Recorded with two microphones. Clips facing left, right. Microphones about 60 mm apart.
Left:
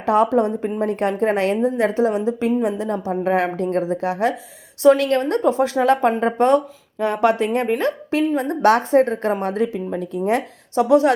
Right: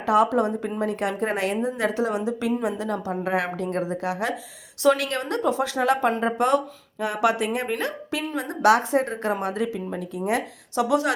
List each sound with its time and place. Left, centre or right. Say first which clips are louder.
0.0 s speech: left 3 dB; left